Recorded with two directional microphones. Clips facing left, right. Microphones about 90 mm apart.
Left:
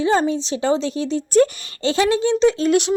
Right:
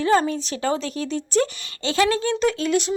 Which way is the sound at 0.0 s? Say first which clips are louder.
Left 1 dB; 20° left (ahead or behind).